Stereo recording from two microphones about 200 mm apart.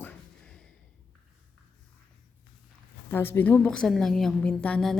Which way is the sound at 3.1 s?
10° left (ahead or behind).